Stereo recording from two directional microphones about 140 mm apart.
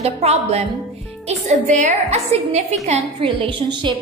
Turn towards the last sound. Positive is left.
turn(degrees=-35)  # may be behind; listen again after turning